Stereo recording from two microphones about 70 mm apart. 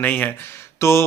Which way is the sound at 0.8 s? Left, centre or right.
Left.